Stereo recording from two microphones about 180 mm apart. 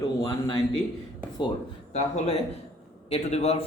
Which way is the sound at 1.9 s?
35° left (ahead or behind).